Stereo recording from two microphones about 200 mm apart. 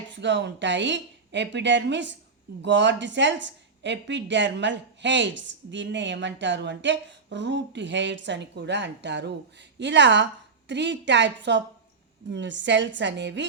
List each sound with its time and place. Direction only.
0.1 s a woman's voice: 60° right (ahead or behind)